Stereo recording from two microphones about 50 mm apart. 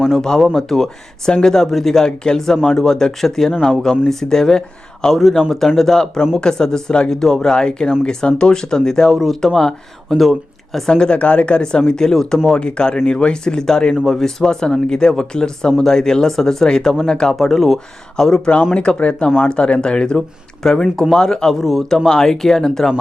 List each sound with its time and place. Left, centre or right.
0.2 s a man's voice: centre
9.1 s a man's voice: centre
9.6 s speech: centre
10.9 s speech: centre
18.7 s speech: left
20.7 s speech: centre
21.6 s speech: centre